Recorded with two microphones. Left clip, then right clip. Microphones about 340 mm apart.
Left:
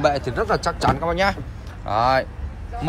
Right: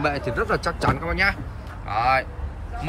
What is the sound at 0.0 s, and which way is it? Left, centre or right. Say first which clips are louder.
Speech: left 4 dB; centre.